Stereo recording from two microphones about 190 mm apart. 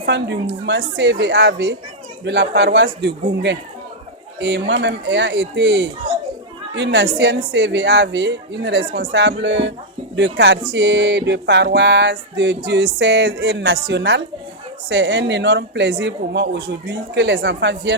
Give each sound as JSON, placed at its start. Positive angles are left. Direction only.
{"t": 0.0, "sound": "a man's voice", "side_deg": -65}
{"t": 0.6, "sound": "music", "side_deg": -65}
{"t": 2.2, "sound": "a man's voice", "side_deg": -65}
{"t": 4.4, "sound": "music", "side_deg": -65}